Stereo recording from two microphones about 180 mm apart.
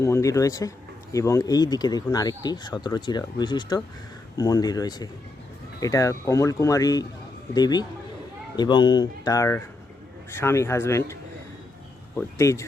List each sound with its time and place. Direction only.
0.0 s a man's voice: 15° left (ahead or behind)